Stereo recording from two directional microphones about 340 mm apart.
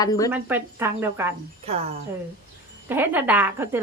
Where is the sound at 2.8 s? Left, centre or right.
Centre.